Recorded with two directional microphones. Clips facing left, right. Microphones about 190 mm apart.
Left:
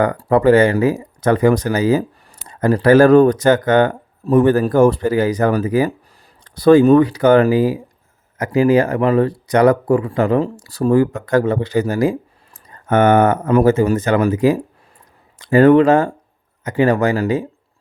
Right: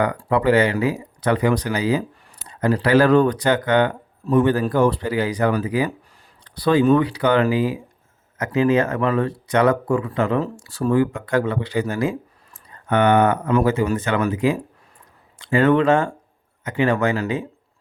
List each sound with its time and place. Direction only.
0.0 s speech: 45° left (ahead or behind)